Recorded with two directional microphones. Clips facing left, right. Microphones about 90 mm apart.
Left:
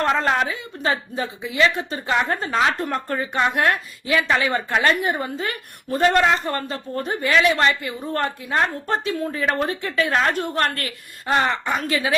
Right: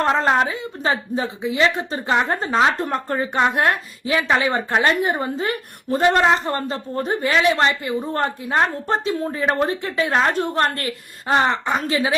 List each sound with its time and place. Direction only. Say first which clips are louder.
0.0 s a woman's voice: right 2 dB; 25° right (ahead or behind)